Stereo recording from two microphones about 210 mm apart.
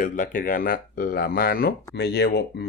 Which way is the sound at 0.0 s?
40° left (ahead or behind).